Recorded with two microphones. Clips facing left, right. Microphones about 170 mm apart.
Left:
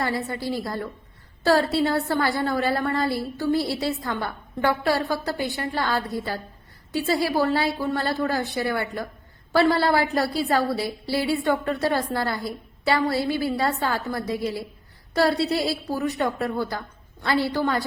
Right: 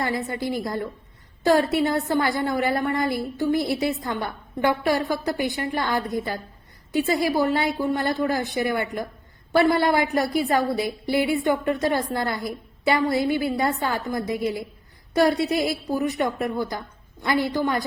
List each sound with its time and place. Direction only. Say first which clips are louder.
0.0 s a woman's voice: right 1 dB; 20° right (ahead or behind)